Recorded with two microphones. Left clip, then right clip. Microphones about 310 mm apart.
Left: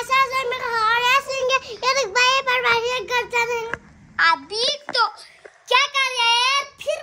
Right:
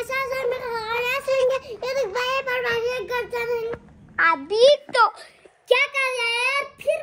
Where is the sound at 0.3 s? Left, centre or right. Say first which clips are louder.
Left 2 dB; left.